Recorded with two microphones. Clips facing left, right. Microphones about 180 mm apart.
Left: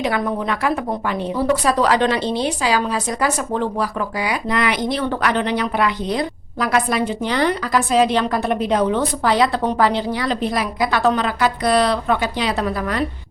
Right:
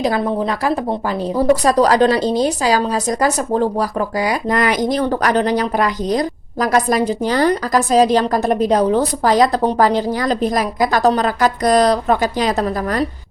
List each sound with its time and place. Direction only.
0.0 s a woman's voice: 30° right (ahead or behind)